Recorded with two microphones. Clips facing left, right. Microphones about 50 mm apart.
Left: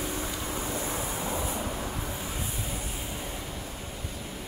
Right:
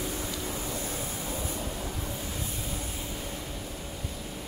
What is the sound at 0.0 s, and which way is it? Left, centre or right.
Vehicle, left.